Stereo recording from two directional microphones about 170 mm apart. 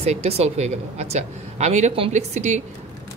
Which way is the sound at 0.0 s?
40° right (ahead or behind).